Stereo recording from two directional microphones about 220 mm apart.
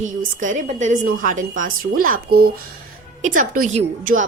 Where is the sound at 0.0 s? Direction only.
35° right (ahead or behind).